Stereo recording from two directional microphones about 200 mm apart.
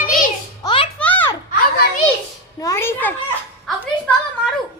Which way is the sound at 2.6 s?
15° left (ahead or behind).